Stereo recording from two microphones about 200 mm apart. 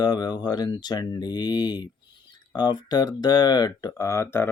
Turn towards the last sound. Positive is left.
turn(degrees=10)  # may be behind; listen again after turning